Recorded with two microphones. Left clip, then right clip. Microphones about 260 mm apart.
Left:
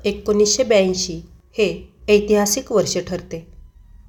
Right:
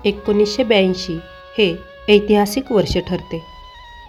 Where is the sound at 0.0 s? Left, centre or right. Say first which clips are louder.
Right 1 dB; right.